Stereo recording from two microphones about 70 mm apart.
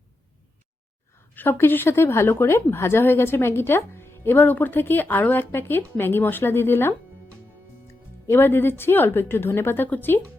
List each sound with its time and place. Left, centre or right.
1.3 s a woman's voice: left
8.3 s a woman's voice: left